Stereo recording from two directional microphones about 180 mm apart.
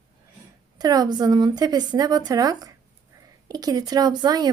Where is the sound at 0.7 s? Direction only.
20° right (ahead or behind).